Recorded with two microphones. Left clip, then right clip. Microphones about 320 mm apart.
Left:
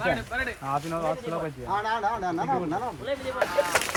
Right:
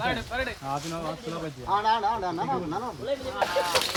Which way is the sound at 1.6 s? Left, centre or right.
Centre.